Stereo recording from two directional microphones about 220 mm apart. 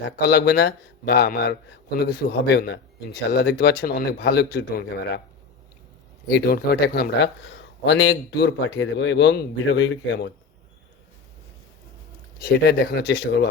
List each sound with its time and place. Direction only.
0.2 s a man's voice: 45° left (ahead or behind)
6.2 s a man's voice: 45° left (ahead or behind)
12.4 s a man's voice: 45° left (ahead or behind)